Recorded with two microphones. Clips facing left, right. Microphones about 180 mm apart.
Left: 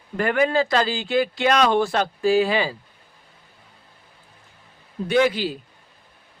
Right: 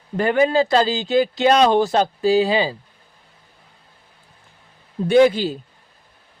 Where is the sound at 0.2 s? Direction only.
25° right (ahead or behind).